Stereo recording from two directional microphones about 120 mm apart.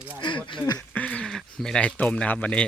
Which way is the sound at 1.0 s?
10° left (ahead or behind).